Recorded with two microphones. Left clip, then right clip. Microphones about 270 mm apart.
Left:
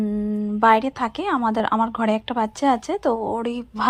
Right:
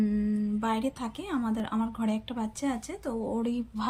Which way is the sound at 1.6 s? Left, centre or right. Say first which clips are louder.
Left 12 dB; left.